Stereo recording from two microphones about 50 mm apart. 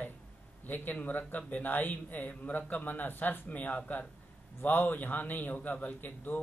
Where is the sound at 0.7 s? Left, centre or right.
Left.